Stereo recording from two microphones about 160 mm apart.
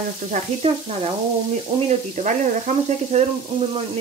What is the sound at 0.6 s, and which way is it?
Speech, 40° right (ahead or behind).